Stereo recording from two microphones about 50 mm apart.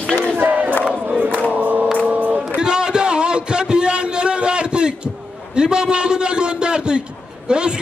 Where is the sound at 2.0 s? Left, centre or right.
Right.